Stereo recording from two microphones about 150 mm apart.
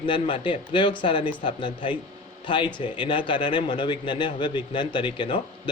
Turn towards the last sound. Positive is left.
turn(degrees=35)  # may be behind; listen again after turning